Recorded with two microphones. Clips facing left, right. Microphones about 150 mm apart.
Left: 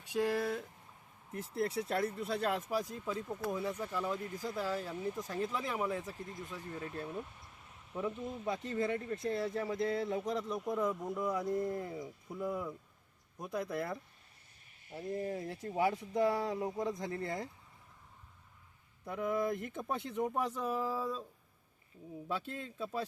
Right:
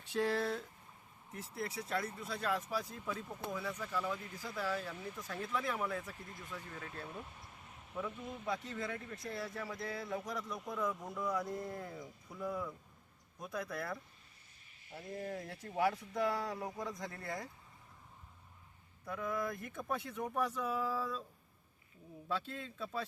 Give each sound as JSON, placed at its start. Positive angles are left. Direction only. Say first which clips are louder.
{"t": 0.0, "sound": "speech", "louder": "left 2 dB", "side_deg": 10}
{"t": 1.3, "sound": "speech", "louder": "left 7 dB", "side_deg": 50}
{"t": 2.5, "sound": "a man's voice", "louder": "left 2 dB", "side_deg": 25}
{"t": 7.9, "sound": "a man's voice", "louder": "left 4 dB", "side_deg": 25}
{"t": 19.0, "sound": "a man's voice", "louder": "left 5 dB", "side_deg": 25}
{"t": 22.3, "sound": "speech", "louder": "even", "side_deg": 15}